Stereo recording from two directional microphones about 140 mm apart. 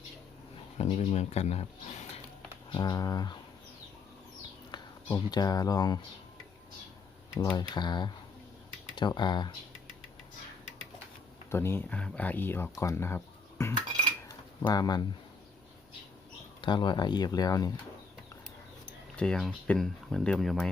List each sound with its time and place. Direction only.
0.8 s speech: 50° left (ahead or behind)
2.7 s speech: 30° left (ahead or behind)
4.7 s speech: 30° left (ahead or behind)
7.3 s speech: 30° left (ahead or behind)
11.5 s speech: 15° left (ahead or behind)
14.3 s pigeon: 30° left (ahead or behind)
16.6 s speech: 35° left (ahead or behind)
19.1 s speech: 5° left (ahead or behind)